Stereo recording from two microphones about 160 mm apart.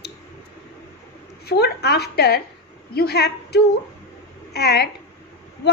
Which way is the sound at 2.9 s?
80° left.